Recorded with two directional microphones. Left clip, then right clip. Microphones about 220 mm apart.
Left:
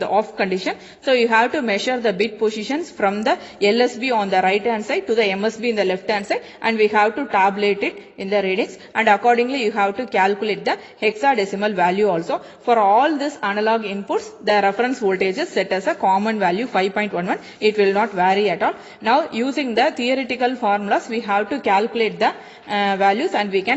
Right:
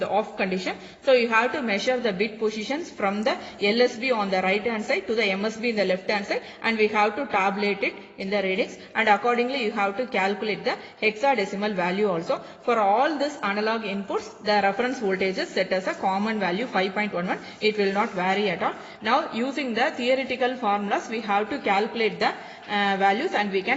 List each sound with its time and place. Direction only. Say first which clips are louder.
0.0 s a woman's voice: left 5 dB; 45° left (ahead or behind)